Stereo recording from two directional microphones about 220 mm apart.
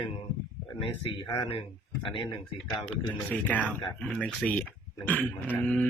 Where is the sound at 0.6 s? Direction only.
20° left (ahead or behind).